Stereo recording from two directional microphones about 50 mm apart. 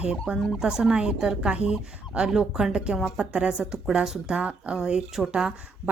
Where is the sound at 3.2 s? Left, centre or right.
Centre.